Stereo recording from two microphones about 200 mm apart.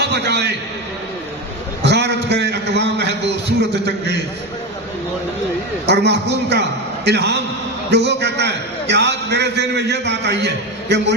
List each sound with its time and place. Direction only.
0.1 s a man's voice: 60° right (ahead or behind)
1.8 s a man's voice: 60° right (ahead or behind)
5.9 s a man's voice: 60° right (ahead or behind)